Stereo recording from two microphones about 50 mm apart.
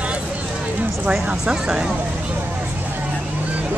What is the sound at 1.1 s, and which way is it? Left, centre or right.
Speech, centre.